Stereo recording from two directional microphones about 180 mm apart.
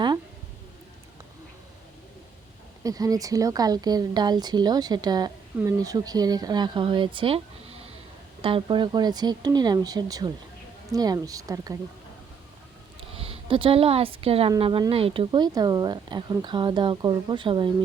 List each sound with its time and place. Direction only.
2.8 s speech: 20° right (ahead or behind)
13.1 s speech: 30° right (ahead or behind)